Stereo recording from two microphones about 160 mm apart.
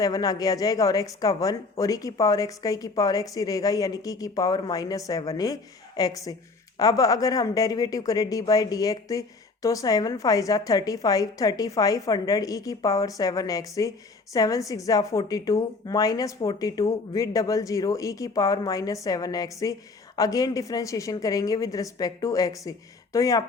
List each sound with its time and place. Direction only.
0.0 s speech: 25° left (ahead or behind)